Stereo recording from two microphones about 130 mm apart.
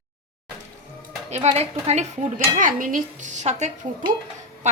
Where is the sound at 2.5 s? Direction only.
90° right; by 3.6 s 60° right (ahead or behind).